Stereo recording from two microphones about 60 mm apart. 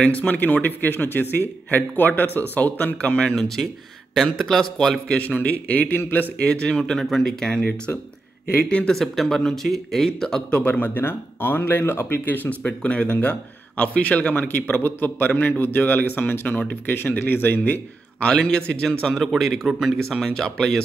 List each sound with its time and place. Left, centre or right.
0.0 s speech: left
3.3 s speech: centre
5.0 s speech: left
6.4 s speech: centre
8.9 s speech: centre
10.6 s speech: left
12.6 s speech: centre
18.7 s speech: centre